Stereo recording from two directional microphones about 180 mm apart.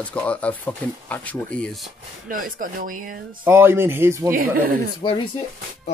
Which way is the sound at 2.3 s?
50° right (ahead or behind).